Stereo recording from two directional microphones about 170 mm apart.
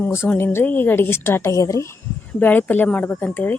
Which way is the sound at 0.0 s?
15° left (ahead or behind).